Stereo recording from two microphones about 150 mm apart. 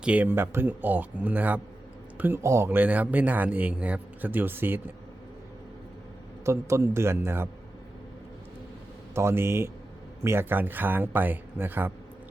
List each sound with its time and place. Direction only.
0.0 s a man's voice: 10° right (ahead or behind)
6.4 s a man's voice: 20° right (ahead or behind)
9.1 s a man's voice: 15° right (ahead or behind)